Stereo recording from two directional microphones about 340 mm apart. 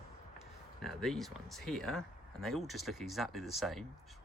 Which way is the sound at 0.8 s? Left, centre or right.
Centre.